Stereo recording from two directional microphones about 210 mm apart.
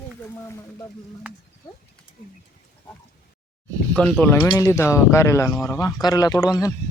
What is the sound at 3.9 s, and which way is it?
Speech, 5° left (ahead or behind).